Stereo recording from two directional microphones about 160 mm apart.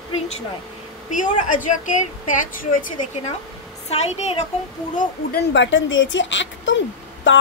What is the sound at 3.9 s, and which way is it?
Speech, 40° left (ahead or behind).